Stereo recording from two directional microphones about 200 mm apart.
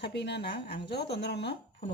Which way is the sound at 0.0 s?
60° left (ahead or behind).